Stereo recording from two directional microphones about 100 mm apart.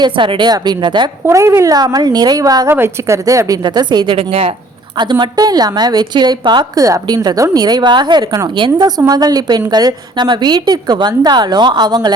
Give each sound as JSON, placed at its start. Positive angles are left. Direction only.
{"t": 0.0, "sound": "a woman's voice", "side_deg": -55}
{"t": 1.2, "sound": "a woman's voice", "side_deg": -30}
{"t": 2.6, "sound": "a woman's voice", "side_deg": -25}
{"t": 3.2, "sound": "a woman's voice", "side_deg": -35}
{"t": 4.9, "sound": "a woman's voice", "side_deg": -50}
{"t": 6.7, "sound": "a woman's voice", "side_deg": -35}
{"t": 9.0, "sound": "a woman's voice", "side_deg": -40}